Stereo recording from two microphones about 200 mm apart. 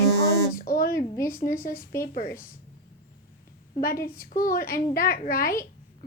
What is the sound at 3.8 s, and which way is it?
A woman's voice, 45° left (ahead or behind).